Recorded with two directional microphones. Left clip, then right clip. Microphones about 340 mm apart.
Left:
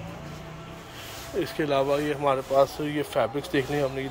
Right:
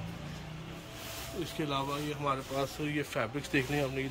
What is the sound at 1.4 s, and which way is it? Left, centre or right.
Speech, centre.